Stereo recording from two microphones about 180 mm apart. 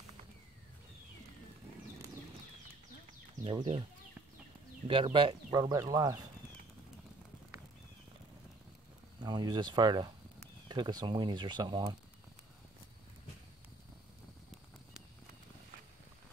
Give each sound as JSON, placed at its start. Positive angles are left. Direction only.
{"t": 3.4, "sound": "speech", "side_deg": -30}
{"t": 4.8, "sound": "speech", "side_deg": -30}
{"t": 9.2, "sound": "speech", "side_deg": -25}